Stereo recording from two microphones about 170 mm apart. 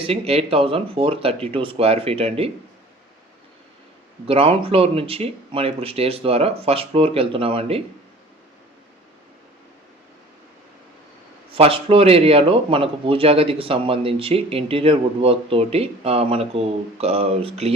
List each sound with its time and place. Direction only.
0.0 s a man's voice: 35° right (ahead or behind)
4.3 s a man's voice: 35° right (ahead or behind)
11.5 s a man's voice: 35° right (ahead or behind)